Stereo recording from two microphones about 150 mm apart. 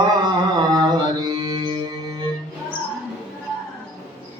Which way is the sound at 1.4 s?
30° right (ahead or behind).